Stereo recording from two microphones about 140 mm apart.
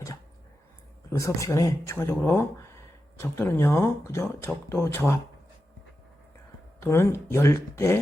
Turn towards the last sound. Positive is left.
turn(degrees=20)  # may be behind; listen again after turning